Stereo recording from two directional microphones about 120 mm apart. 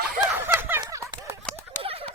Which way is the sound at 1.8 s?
50° right (ahead or behind).